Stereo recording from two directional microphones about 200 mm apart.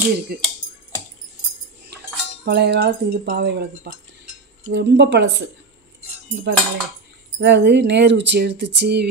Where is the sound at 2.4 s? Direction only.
60° right (ahead or behind).